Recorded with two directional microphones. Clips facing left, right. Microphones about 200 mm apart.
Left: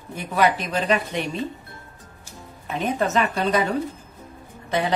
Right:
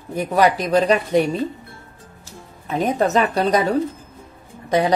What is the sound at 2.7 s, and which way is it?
A woman's voice, 40° right (ahead or behind).